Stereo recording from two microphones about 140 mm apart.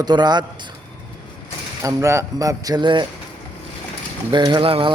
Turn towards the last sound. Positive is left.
turn(degrees=-40)  # may be behind; listen again after turning